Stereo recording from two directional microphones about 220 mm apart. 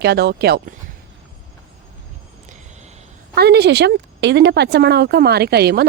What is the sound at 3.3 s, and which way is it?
A woman's voice, 45° right (ahead or behind).